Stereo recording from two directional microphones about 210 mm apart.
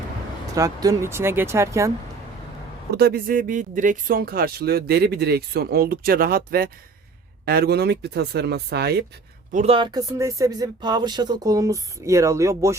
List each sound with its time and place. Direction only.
0.5 s speech: 15° right (ahead or behind)
2.9 s speech: 45° right (ahead or behind)
9.5 s speech: 30° right (ahead or behind); by 12.7 s 15° right (ahead or behind)